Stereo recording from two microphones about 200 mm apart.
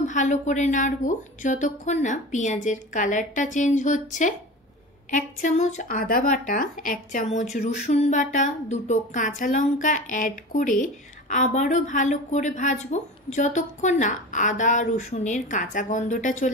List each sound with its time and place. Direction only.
0.0 s a woman's voice: 40° left (ahead or behind)